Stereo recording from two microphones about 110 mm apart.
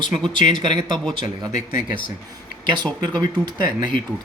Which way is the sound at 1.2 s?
40° right (ahead or behind).